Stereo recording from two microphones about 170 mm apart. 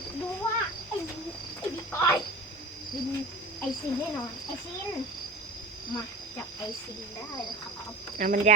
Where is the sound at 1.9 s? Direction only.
15° left (ahead or behind).